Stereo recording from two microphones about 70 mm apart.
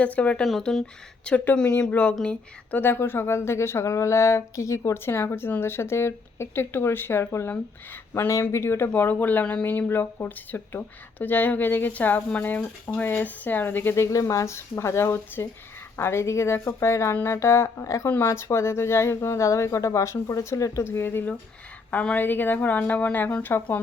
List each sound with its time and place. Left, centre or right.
0.0 s speech: centre
2.7 s speech: left
8.3 s speech: left
8.9 s speech: left
20.8 s speech: left
21.8 s speech: left